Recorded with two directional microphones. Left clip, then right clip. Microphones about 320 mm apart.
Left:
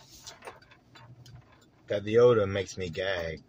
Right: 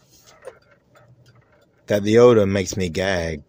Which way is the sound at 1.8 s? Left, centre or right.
Right.